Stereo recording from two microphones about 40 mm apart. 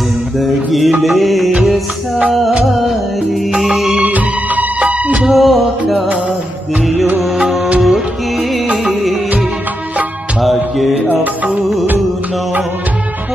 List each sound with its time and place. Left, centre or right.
0.4 s music: centre
2.6 s music: centre
4.0 s music: right
5.2 s music: centre
7.8 s music: centre
10.4 s music: centre